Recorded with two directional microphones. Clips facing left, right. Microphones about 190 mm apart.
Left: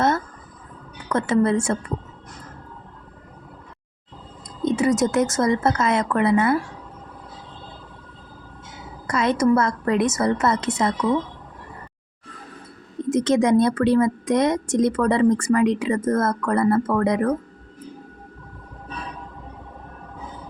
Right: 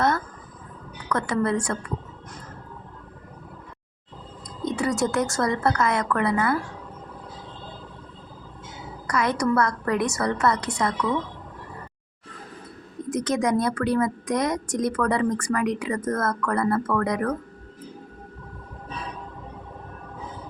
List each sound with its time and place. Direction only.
1.1 s a woman's voice: 25° left (ahead or behind)
4.6 s a woman's voice: 20° left (ahead or behind)
9.0 s a woman's voice: 25° left (ahead or behind)
13.1 s a woman's voice: 25° left (ahead or behind)